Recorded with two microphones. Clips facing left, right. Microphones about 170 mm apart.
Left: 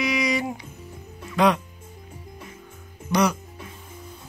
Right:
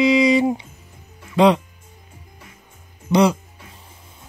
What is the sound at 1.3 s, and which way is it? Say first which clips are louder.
Speech: right 5 dB; 25° right (ahead or behind).